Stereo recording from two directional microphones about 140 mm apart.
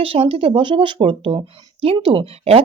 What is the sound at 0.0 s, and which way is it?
Speech, 40° right (ahead or behind).